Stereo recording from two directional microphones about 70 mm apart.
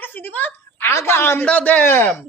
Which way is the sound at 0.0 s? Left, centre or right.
Left.